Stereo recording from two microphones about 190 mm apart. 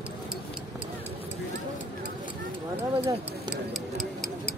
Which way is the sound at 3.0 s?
Centre (ahead or behind).